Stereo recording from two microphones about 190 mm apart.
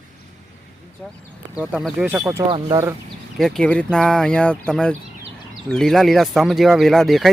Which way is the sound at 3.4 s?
Centre (ahead or behind).